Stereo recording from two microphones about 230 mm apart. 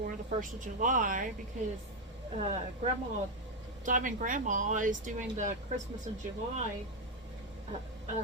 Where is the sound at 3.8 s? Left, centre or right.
Right.